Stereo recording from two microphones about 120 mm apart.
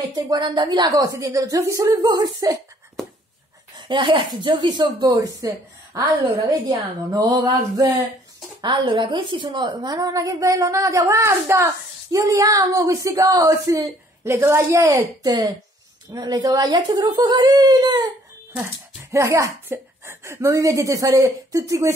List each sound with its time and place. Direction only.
0.1 s speech: 35° right (ahead or behind)
3.7 s a woman's voice: 40° right (ahead or behind)
19.1 s a woman's voice: 25° right (ahead or behind)